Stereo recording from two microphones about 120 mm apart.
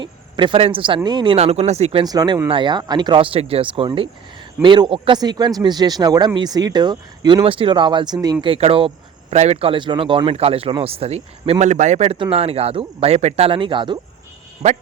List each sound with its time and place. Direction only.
0.0 s a sound: 40° right (ahead or behind)
0.6 s speech: 45° right (ahead or behind)
1.4 s speech: 60° right (ahead or behind)
2.0 s speech: 35° right (ahead or behind)
7.4 s speech: 50° right (ahead or behind)
8.4 s speech: 55° right (ahead or behind)
9.3 s speech: 65° right (ahead or behind)
11.6 s a man's voice: 80° right
12.2 s speech: 55° right (ahead or behind)